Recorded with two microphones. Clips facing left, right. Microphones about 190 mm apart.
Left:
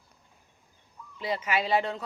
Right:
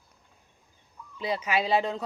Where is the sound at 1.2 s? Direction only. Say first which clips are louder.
Right 1 dB; 15° right (ahead or behind).